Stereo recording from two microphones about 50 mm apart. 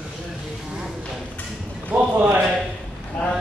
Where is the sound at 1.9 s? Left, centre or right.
Right.